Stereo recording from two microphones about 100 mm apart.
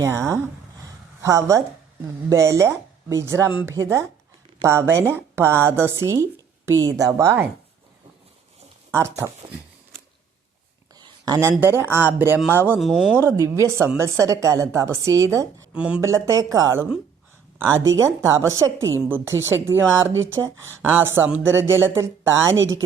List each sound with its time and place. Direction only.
0.0 s a woman's voice: 30° right (ahead or behind)
8.9 s a woman's voice: 30° right (ahead or behind)
10.9 s a sound: 40° right (ahead or behind)
11.6 s a woman's voice: 25° right (ahead or behind)
12.8 s speech: 5° right (ahead or behind)
13.4 s a woman's voice: 25° right (ahead or behind)
15.7 s speech: 10° right (ahead or behind)
16.0 s a woman's voice: 30° right (ahead or behind)